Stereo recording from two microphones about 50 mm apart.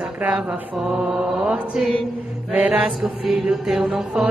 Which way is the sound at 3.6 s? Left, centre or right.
Centre.